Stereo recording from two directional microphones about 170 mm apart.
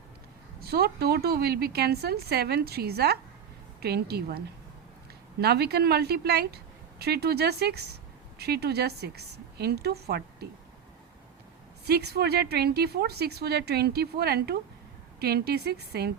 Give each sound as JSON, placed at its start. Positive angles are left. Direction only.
{"t": 0.6, "sound": "a woman's voice", "side_deg": -65}
{"t": 11.9, "sound": "a woman's voice", "side_deg": -70}